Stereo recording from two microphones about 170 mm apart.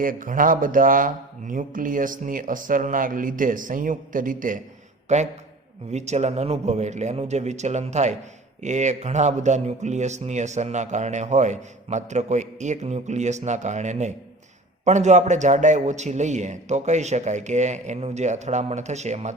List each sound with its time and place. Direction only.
0.0 s a man's voice: 55° right (ahead or behind)